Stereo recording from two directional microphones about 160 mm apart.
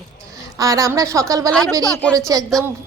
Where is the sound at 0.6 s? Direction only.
20° right (ahead or behind).